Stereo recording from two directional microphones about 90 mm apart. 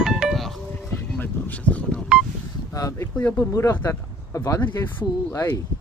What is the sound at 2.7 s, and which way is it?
Speech, 40° left (ahead or behind).